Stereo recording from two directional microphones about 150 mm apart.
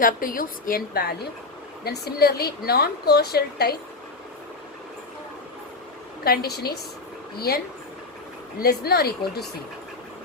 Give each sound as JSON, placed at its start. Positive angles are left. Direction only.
{"t": 0.0, "sound": "a woman's voice", "side_deg": 70}
{"t": 6.2, "sound": "a woman's voice", "side_deg": 90}
{"t": 8.6, "sound": "a woman's voice", "side_deg": 90}